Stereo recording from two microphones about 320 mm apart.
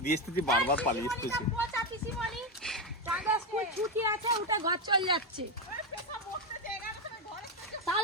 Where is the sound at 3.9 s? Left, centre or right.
Centre.